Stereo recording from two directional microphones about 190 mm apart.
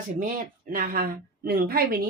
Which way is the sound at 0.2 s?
45° right (ahead or behind).